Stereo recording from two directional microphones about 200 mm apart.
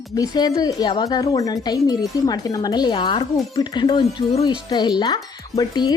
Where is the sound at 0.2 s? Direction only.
20° left (ahead or behind).